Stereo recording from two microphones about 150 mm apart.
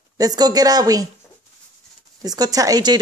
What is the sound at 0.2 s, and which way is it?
Speech, 25° right (ahead or behind).